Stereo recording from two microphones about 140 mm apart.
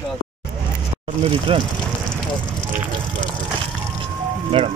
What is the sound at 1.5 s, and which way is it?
Speech, 40° right (ahead or behind).